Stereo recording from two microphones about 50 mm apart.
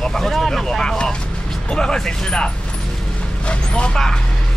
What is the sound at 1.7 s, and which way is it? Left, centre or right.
Speech, centre.